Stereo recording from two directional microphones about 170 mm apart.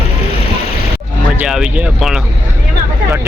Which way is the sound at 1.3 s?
5° right (ahead or behind).